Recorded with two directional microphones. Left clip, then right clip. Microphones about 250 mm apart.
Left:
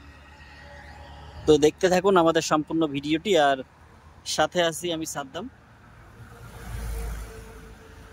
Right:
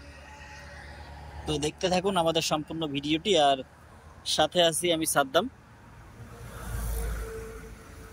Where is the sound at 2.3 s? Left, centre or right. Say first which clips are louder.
Left 4 dB; left.